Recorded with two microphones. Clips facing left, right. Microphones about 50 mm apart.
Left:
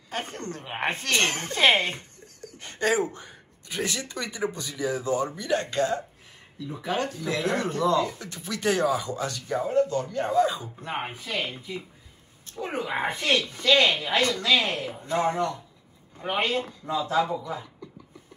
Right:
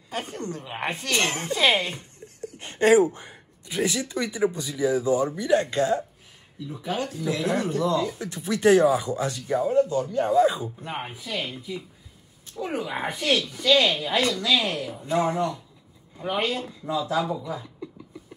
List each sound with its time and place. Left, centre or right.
0.1 s speech: left
2.4 s speech: right
3.7 s speech: centre
6.7 s speech: left
8.2 s speech: right
9.6 s speech: left